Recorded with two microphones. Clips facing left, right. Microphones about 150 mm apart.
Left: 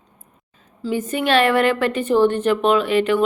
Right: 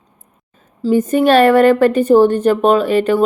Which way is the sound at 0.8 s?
45° right (ahead or behind).